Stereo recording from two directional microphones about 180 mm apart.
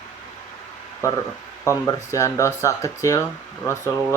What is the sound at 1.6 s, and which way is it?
Speech, 15° left (ahead or behind).